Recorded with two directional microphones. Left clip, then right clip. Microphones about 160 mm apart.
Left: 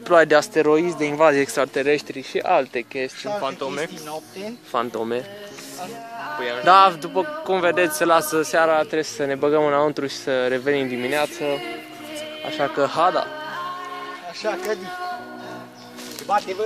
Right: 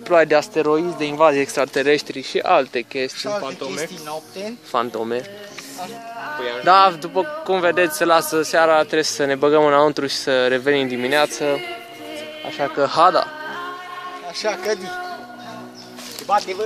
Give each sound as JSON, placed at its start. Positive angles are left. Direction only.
{"t": 0.1, "sound": "speech", "side_deg": 10}
{"t": 1.7, "sound": "speech", "side_deg": -15}
{"t": 3.4, "sound": "speech", "side_deg": 20}
{"t": 4.1, "sound": "speech", "side_deg": -50}
{"t": 4.7, "sound": "a man's voice", "side_deg": 0}
{"t": 6.6, "sound": "a man's voice", "side_deg": 0}
{"t": 8.6, "sound": "speech", "side_deg": -10}
{"t": 11.4, "sound": "speech", "side_deg": -20}
{"t": 12.4, "sound": "speech", "side_deg": 10}
{"t": 12.9, "sound": "speech", "side_deg": -25}
{"t": 14.3, "sound": "speech", "side_deg": -60}
{"t": 16.3, "sound": "speech", "side_deg": -5}